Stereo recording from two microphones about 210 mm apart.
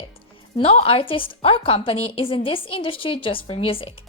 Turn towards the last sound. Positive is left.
turn(degrees=25)  # may be behind; listen again after turning